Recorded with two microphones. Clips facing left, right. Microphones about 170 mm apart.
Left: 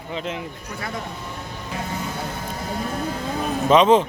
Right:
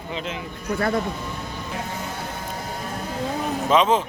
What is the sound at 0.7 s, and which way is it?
Speech, 60° right (ahead or behind).